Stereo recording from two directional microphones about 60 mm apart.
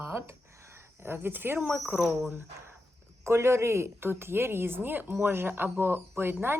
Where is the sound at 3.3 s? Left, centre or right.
Right.